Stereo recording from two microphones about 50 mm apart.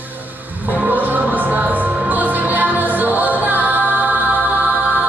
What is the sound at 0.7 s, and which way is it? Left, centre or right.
Music, right.